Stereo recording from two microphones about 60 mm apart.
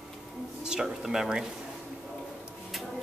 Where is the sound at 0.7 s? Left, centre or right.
Centre.